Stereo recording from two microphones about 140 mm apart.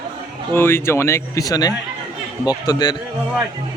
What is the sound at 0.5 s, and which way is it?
A man's voice, 15° left (ahead or behind).